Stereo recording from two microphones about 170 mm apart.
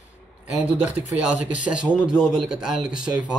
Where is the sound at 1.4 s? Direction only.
45° left (ahead or behind).